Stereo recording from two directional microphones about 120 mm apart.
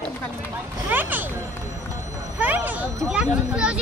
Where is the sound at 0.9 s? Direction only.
15° right (ahead or behind).